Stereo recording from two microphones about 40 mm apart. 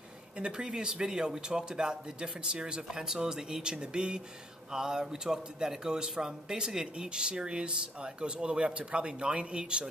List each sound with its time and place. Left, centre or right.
0.4 s speech: right